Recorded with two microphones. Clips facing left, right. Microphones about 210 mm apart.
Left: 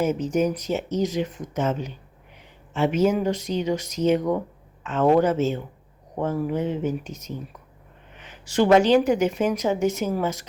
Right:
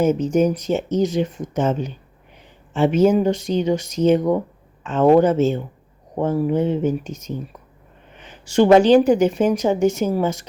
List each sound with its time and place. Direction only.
0.0 s speech: 30° right (ahead or behind)
2.7 s speech: 30° right (ahead or behind)
8.2 s a woman's voice: 30° right (ahead or behind)